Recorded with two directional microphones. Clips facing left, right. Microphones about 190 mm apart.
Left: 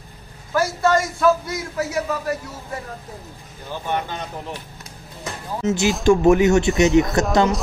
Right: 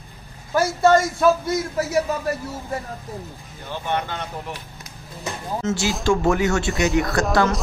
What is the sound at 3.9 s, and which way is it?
Speech, 20° left (ahead or behind).